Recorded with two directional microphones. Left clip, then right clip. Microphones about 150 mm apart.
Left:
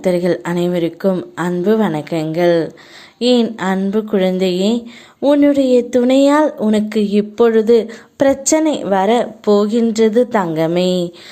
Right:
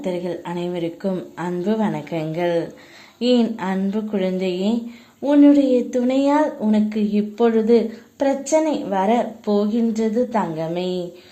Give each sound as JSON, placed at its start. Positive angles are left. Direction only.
{"t": 0.0, "sound": "speech", "side_deg": 35}